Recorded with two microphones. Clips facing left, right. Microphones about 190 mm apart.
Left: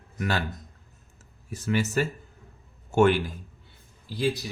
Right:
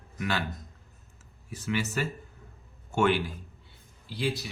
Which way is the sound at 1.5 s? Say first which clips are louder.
Left 5 dB; 45° left (ahead or behind).